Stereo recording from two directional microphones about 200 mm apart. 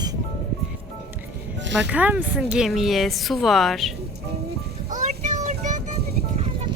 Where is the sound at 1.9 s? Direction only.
10° right (ahead or behind).